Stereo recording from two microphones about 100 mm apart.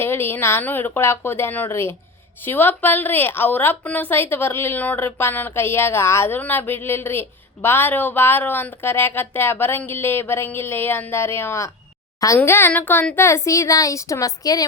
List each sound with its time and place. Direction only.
0.0 s a woman's voice: 25° left (ahead or behind)